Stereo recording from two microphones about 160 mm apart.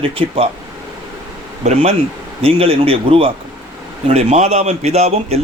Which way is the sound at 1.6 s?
40° right (ahead or behind).